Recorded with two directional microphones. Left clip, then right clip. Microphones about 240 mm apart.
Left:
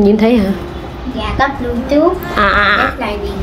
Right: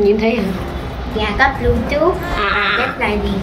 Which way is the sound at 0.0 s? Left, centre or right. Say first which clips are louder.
Left 3 dB; left.